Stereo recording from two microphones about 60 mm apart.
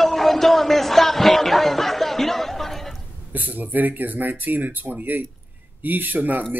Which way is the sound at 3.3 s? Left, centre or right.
Right.